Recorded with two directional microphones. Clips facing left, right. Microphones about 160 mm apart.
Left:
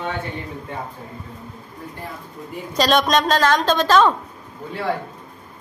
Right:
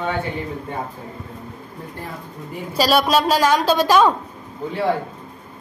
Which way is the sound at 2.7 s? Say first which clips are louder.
Right 1 dB; 5° right (ahead or behind).